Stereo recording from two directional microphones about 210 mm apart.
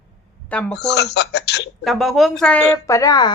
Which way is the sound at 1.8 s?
Centre (ahead or behind).